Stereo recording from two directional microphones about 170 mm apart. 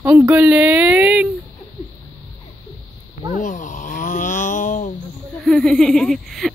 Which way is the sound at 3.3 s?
50° left (ahead or behind).